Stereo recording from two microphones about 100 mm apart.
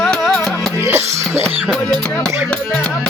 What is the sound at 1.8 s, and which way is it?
Music, 10° left (ahead or behind).